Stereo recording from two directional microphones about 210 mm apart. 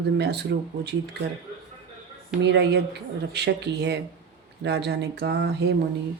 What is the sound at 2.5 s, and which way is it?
Speech, 50° right (ahead or behind).